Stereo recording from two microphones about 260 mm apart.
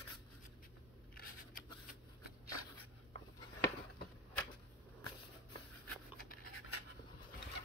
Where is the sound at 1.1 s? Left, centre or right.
Left.